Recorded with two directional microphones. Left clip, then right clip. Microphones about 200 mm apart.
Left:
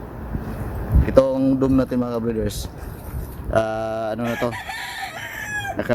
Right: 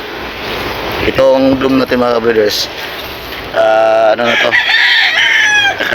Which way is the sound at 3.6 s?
5° left (ahead or behind).